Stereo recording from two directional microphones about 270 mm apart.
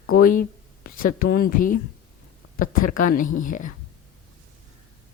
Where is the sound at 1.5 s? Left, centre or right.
Left.